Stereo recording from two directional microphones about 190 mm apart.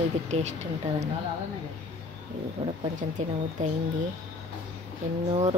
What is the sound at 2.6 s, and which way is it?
Speech, 30° right (ahead or behind).